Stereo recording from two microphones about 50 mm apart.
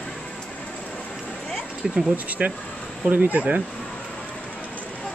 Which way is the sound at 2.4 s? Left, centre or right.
Right.